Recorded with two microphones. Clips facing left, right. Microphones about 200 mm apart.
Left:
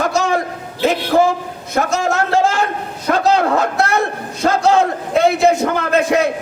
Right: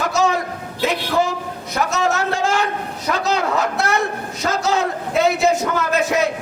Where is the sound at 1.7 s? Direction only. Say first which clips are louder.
Left 3 dB; 50° left (ahead or behind).